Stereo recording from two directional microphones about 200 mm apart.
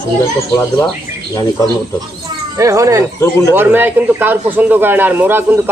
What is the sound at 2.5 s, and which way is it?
Speech, 15° right (ahead or behind).